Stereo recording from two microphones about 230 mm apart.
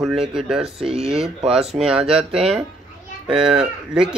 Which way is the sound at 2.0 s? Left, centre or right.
Centre.